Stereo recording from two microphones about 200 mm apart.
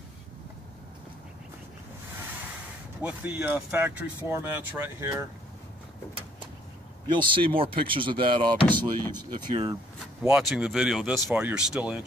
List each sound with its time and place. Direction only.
3.0 s speech: 10° right (ahead or behind)
7.1 s speech: 25° right (ahead or behind)
10.2 s speech: centre (ahead or behind)